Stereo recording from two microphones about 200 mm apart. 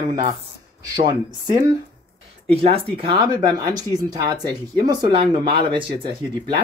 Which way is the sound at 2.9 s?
25° right (ahead or behind).